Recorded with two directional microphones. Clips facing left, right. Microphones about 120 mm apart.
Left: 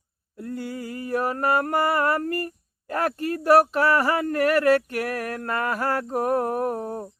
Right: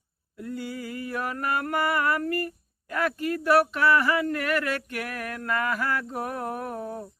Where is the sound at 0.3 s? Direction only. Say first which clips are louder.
Left 2 dB; 40° left (ahead or behind).